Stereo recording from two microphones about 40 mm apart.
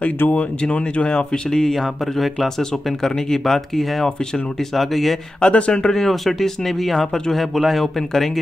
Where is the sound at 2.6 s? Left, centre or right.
Centre.